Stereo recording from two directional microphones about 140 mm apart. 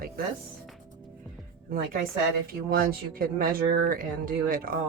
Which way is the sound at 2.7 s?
90° right.